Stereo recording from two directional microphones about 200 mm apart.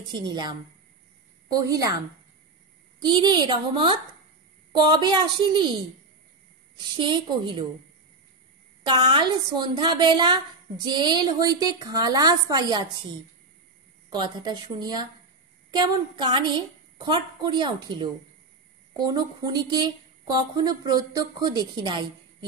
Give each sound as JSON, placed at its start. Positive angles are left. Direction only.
{"t": 0.1, "sound": "a woman's voice", "side_deg": -20}
{"t": 3.0, "sound": "a woman's voice", "side_deg": -20}
{"t": 6.8, "sound": "a woman's voice", "side_deg": -25}
{"t": 8.8, "sound": "a woman's voice", "side_deg": -20}
{"t": 14.1, "sound": "a woman's voice", "side_deg": -20}